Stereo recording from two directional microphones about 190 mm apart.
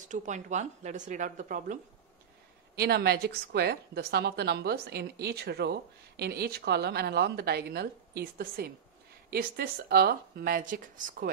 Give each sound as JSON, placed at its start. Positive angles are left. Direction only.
{"t": 0.1, "sound": "speech", "side_deg": -40}
{"t": 2.7, "sound": "a woman's voice", "side_deg": -60}